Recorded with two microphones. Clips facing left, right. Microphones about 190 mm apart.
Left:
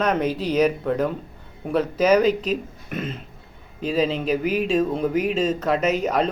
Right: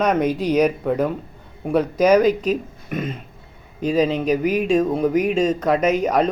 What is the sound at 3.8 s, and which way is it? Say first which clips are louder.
Speech: right 3 dB; 45° right (ahead or behind).